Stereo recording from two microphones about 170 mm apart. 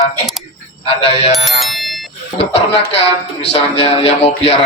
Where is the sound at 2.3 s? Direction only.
35° left (ahead or behind).